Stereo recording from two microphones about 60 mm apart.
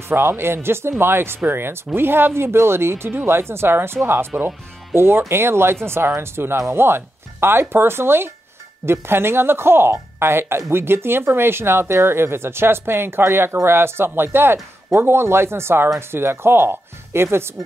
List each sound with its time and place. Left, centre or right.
0.1 s speech: right